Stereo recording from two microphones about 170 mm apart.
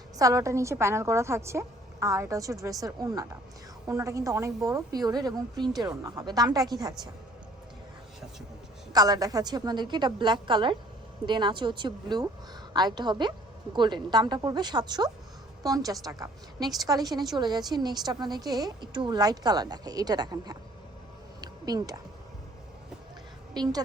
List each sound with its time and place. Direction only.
0.2 s a woman's voice: 20° right (ahead or behind)
8.9 s a woman's voice: 20° right (ahead or behind)
21.4 s music: 20° right (ahead or behind)